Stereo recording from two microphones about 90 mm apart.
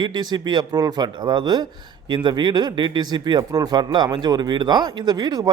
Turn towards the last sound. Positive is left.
turn(degrees=-50)  # may be behind; listen again after turning